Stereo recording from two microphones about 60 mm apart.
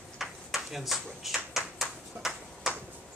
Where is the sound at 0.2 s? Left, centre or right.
Centre.